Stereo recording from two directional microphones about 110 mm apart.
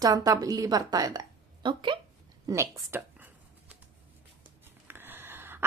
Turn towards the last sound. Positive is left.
turn(degrees=-20)  # may be behind; listen again after turning